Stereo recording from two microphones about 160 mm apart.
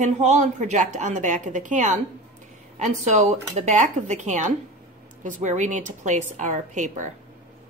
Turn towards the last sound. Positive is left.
turn(degrees=-50)  # may be behind; listen again after turning